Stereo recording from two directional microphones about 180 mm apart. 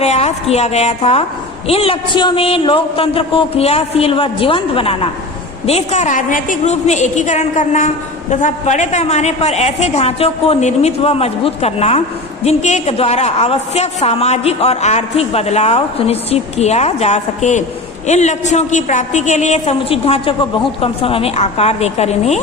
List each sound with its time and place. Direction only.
0.0 s a woman's voice: 35° left (ahead or behind)